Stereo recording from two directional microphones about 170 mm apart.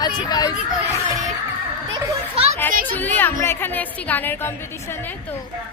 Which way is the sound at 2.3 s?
35° right (ahead or behind).